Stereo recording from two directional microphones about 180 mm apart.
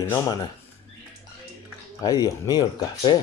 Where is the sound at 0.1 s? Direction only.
20° left (ahead or behind).